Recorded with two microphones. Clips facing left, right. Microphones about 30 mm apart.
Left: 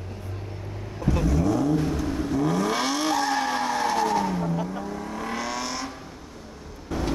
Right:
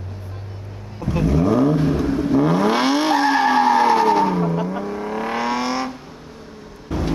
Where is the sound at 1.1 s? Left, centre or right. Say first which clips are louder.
Right 7 dB; right.